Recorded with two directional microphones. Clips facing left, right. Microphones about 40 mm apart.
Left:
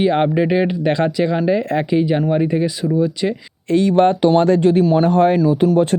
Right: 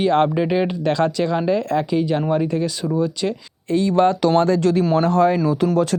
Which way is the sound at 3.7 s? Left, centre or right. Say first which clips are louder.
Left 3 dB; left.